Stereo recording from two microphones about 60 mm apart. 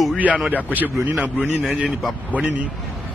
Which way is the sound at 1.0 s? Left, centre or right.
Right.